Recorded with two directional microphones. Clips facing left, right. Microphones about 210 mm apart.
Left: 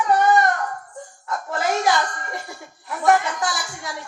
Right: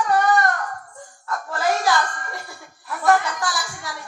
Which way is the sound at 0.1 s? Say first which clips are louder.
Left 3 dB; 20° left (ahead or behind).